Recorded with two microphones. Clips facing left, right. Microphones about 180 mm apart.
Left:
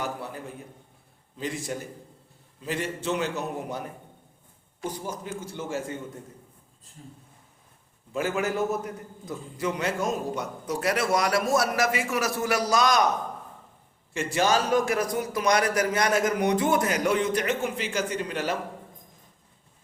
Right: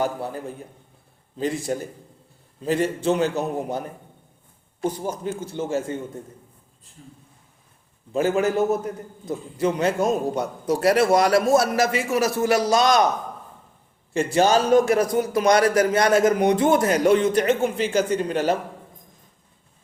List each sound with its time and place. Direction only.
1.4 s a man's voice: 35° right (ahead or behind)
5.2 s a man's voice: 25° right (ahead or behind)
8.1 s a man's voice: 30° right (ahead or behind)
14.1 s a man's voice: 30° right (ahead or behind)